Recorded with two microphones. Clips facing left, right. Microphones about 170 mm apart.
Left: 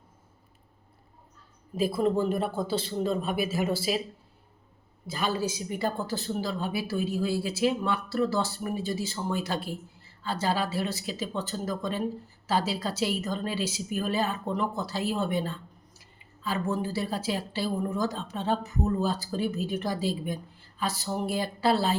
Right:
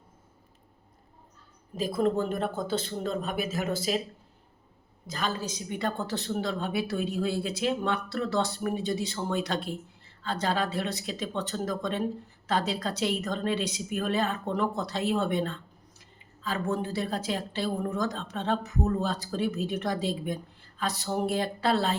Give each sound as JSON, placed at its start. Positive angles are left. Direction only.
{"t": 1.8, "sound": "a woman's voice", "side_deg": 5}
{"t": 5.0, "sound": "a woman's voice", "side_deg": 10}